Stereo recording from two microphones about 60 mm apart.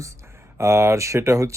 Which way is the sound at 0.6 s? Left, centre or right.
Right.